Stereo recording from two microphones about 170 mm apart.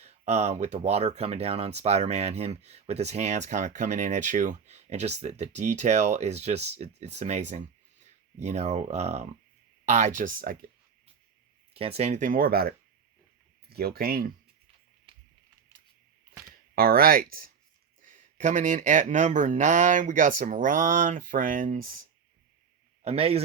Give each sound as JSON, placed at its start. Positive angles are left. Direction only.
{"t": 0.0, "sound": "speech", "side_deg": -40}
{"t": 11.7, "sound": "speech", "side_deg": -35}
{"t": 16.7, "sound": "speech", "side_deg": -60}
{"t": 18.0, "sound": "speech", "side_deg": -50}
{"t": 23.0, "sound": "speech", "side_deg": -35}